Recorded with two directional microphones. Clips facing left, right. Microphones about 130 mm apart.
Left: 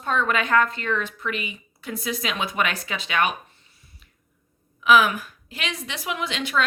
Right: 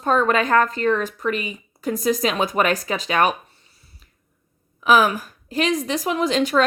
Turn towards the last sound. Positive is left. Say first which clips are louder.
# right 7 dB
turn(degrees=-40)  # may be behind; listen again after turning